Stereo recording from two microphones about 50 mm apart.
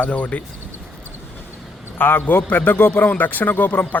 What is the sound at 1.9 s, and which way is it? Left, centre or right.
A man's voice, left.